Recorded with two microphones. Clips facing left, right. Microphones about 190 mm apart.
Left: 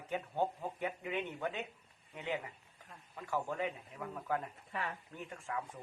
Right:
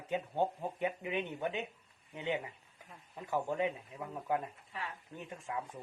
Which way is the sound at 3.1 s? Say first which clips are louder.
Right 3 dB; 20° right (ahead or behind).